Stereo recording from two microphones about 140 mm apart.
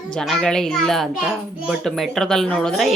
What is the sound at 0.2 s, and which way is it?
A woman's voice, 5° left (ahead or behind).